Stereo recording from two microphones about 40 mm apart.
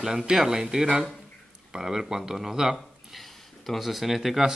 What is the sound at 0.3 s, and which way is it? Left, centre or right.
Speech, centre.